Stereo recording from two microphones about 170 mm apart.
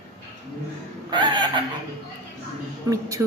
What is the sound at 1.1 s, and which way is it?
Speech, 25° right (ahead or behind).